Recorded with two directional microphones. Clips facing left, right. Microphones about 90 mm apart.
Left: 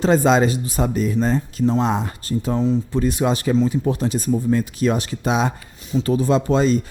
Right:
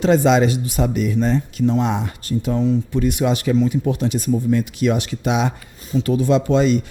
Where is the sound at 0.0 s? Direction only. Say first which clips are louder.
Right 1 dB; 35° left (ahead or behind).